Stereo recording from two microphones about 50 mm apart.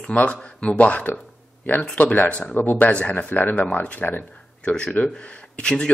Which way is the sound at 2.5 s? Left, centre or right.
Left.